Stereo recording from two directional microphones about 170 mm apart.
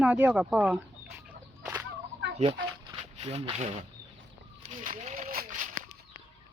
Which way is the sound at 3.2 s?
35° right (ahead or behind).